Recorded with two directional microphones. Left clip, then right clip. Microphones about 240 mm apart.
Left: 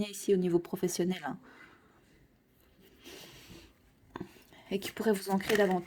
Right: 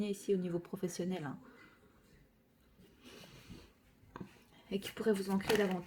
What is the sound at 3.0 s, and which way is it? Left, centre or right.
Snort, left.